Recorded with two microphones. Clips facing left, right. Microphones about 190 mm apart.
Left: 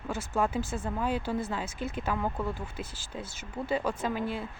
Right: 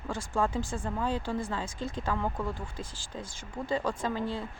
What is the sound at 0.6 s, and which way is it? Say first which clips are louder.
Speech: left 1 dB; 15° right (ahead or behind).